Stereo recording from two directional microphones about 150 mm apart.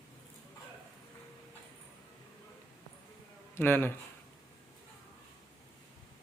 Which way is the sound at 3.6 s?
15° left (ahead or behind).